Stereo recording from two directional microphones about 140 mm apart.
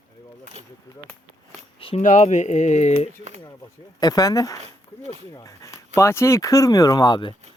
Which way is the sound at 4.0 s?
25° left (ahead or behind).